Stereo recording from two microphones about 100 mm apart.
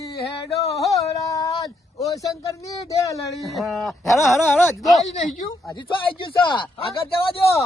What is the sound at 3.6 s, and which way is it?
Speech, centre (ahead or behind).